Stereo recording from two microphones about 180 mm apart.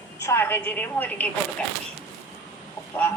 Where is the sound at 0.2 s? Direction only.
15° left (ahead or behind).